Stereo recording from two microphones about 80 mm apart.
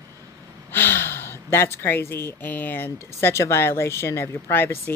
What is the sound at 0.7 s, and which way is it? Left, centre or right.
Speech, left.